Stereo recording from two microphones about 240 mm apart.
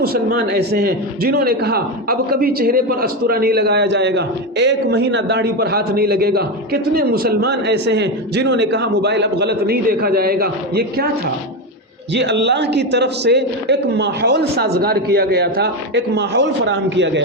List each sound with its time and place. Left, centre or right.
0.0 s a man's voice: right
12.1 s a man's voice: right